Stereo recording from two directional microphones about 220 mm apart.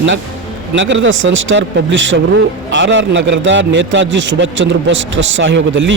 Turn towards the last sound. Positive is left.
turn(degrees=-55)  # may be behind; listen again after turning